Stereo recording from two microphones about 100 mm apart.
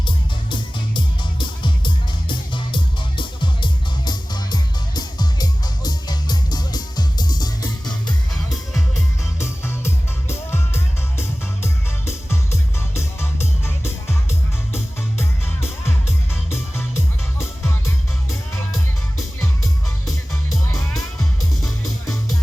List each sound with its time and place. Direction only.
0.5 s music: 55° left (ahead or behind)
9.4 s music: 25° left (ahead or behind)
21.6 s music: centre (ahead or behind)